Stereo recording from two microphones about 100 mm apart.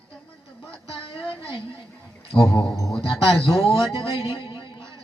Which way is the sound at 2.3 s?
25° left (ahead or behind).